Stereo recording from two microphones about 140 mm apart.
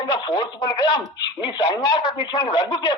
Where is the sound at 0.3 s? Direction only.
30° left (ahead or behind).